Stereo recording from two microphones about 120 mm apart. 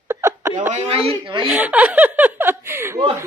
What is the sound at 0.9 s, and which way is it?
Speech, 55° right (ahead or behind).